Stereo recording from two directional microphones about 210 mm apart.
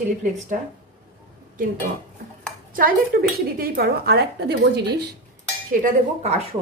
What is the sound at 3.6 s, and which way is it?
A woman's voice, 50° right (ahead or behind).